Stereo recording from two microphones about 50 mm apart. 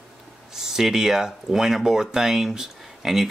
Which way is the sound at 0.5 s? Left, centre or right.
Centre.